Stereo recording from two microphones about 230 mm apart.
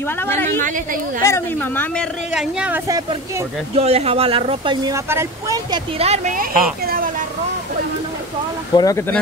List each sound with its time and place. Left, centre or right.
0.0 s a woman's voice: centre
2.3 s speech: centre
2.9 s speech: centre
3.7 s speech: right
5.9 s speech: right
8.7 s a woman's voice: centre